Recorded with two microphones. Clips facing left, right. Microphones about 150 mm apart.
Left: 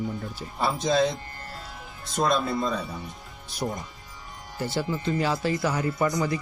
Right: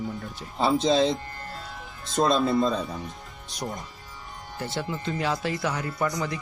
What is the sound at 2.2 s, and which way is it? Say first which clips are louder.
Speech: right 3 dB; 25° right (ahead or behind).